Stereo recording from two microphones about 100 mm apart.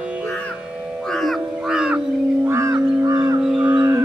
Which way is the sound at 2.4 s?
30° right (ahead or behind).